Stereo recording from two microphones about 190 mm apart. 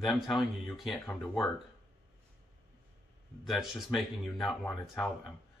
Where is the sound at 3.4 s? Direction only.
Centre (ahead or behind).